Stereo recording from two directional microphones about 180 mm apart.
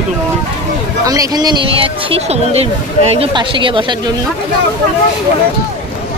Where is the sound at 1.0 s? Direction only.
20° right (ahead or behind).